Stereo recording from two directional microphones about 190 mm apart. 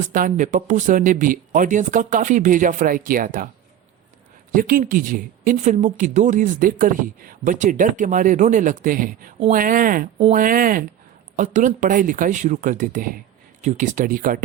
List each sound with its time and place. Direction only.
0.0 s speech: 45° right (ahead or behind)
4.5 s speech: 50° right (ahead or behind)